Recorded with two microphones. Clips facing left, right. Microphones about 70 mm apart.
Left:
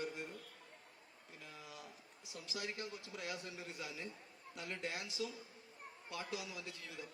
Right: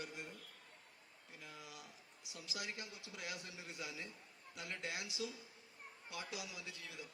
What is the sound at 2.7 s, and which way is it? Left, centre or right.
A man's voice, centre.